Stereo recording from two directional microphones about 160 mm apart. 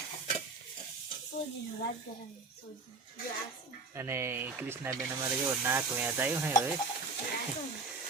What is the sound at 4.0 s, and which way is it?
Speech, 15° right (ahead or behind).